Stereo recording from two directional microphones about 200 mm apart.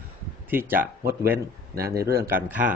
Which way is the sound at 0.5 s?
10° right (ahead or behind).